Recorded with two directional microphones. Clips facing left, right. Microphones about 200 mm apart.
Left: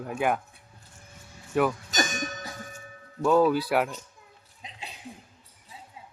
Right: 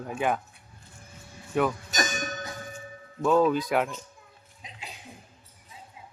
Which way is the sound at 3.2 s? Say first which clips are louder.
Left 1 dB; 5° left (ahead or behind).